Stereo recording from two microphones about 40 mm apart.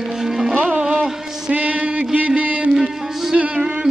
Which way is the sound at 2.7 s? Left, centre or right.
Centre.